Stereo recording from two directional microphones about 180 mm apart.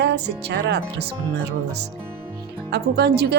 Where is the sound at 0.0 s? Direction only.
70° right (ahead or behind).